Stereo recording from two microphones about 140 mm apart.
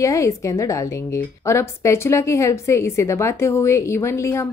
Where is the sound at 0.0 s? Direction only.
20° left (ahead or behind).